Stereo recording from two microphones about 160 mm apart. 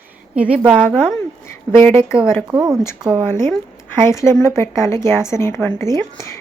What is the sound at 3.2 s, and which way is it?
A woman's voice, 15° left (ahead or behind).